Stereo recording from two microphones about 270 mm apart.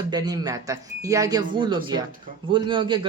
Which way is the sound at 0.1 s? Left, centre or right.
Centre.